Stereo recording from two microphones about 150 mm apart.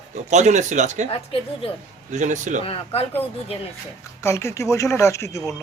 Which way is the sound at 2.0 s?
55° right (ahead or behind).